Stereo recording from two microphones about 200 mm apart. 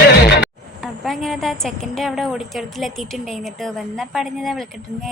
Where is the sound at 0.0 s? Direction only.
55° left (ahead or behind).